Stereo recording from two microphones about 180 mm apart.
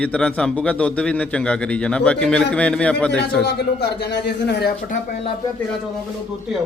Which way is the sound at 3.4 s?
65° left (ahead or behind).